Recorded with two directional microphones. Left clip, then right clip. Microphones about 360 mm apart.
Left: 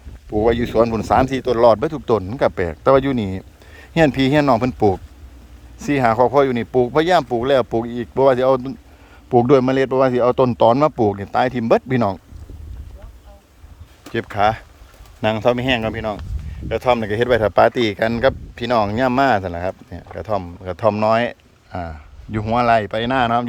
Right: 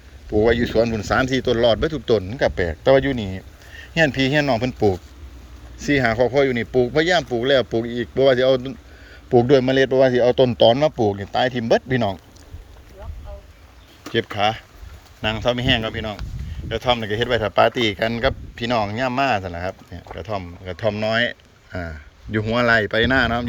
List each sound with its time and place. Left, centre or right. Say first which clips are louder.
0.3 s a man's voice: left 1 dB; centre
14.1 s a man's voice: left 2 dB; centre